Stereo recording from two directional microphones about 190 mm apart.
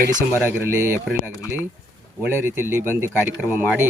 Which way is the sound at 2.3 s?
10° right (ahead or behind).